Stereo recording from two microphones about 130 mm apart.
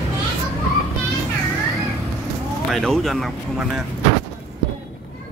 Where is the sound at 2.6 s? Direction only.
Centre (ahead or behind).